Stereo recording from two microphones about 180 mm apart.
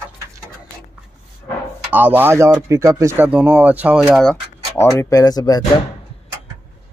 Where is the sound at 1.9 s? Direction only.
10° right (ahead or behind).